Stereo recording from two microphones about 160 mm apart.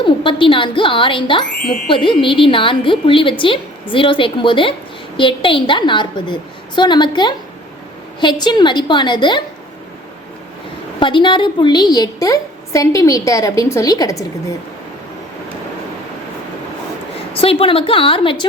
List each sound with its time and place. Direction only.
0.0 s a woman's voice: 30° left (ahead or behind)
11.0 s a woman's voice: 30° left (ahead or behind)
17.3 s a woman's voice: 35° left (ahead or behind)